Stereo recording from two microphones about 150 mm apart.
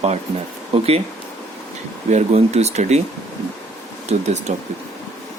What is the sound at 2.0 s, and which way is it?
Speech, 50° right (ahead or behind).